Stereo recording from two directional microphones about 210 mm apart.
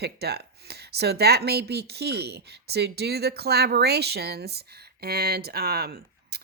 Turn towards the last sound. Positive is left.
turn(degrees=-50)  # may be behind; listen again after turning